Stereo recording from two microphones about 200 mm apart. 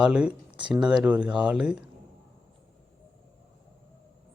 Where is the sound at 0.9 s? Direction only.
5° right (ahead or behind).